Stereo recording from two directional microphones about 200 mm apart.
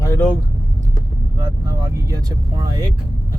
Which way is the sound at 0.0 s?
15° left (ahead or behind).